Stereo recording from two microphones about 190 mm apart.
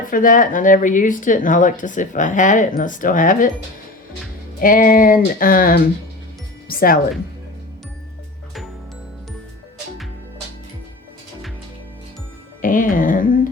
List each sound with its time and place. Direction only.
0.1 s a woman's voice: 45° left (ahead or behind)
4.6 s a woman's voice: 45° left (ahead or behind)
12.6 s a woman's voice: 45° left (ahead or behind)